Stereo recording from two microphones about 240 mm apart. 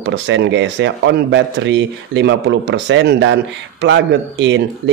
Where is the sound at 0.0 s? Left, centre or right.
Right.